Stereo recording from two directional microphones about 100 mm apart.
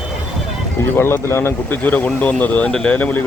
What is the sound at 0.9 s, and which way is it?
Speech, 25° left (ahead or behind).